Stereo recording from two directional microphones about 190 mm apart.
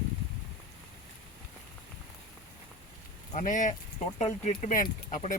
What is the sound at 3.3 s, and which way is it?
Speech, 40° left (ahead or behind).